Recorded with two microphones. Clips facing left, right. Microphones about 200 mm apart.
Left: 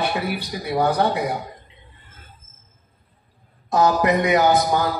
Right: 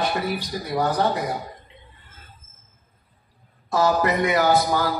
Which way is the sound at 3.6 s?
20° left (ahead or behind).